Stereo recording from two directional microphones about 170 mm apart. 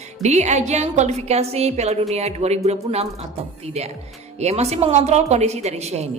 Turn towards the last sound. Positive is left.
turn(degrees=-40)  # may be behind; listen again after turning